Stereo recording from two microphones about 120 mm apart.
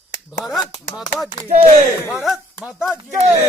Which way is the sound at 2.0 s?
20° left (ahead or behind).